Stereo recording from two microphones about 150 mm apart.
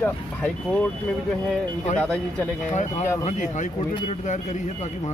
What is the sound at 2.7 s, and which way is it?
Speech, 50° left (ahead or behind).